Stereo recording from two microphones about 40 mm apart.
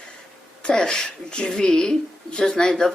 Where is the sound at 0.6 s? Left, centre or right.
Centre.